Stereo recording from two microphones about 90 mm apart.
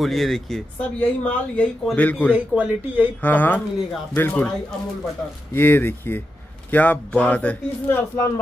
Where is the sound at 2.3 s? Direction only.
15° right (ahead or behind).